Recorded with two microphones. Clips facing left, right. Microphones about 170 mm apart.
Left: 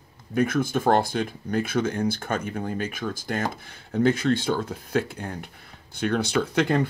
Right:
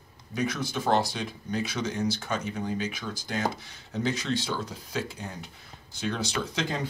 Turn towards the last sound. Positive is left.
turn(degrees=60)  # may be behind; listen again after turning